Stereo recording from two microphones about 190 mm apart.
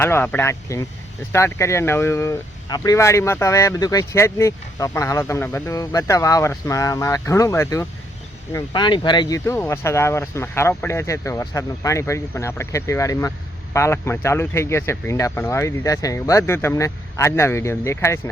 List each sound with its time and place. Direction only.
0.0 s speech: 10° left (ahead or behind)